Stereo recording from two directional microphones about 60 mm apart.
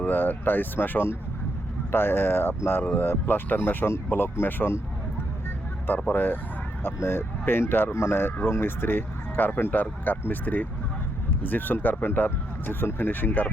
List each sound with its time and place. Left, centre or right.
0.0 s speech: left
6.1 s speech: left